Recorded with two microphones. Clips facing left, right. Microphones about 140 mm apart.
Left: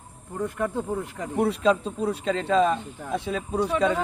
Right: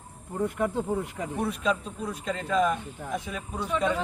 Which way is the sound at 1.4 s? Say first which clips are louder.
Left 7 dB; 30° left (ahead or behind).